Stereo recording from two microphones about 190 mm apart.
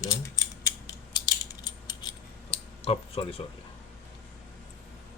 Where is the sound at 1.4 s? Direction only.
20° left (ahead or behind).